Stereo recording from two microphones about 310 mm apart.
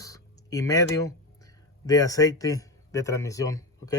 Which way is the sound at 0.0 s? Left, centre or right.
Centre.